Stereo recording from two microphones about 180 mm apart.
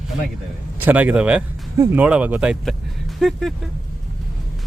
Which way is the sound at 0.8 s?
10° right (ahead or behind).